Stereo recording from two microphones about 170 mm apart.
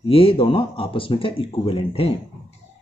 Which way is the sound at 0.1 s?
35° left (ahead or behind).